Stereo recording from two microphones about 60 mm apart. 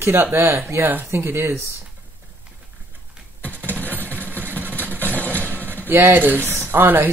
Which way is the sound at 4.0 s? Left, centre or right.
Left.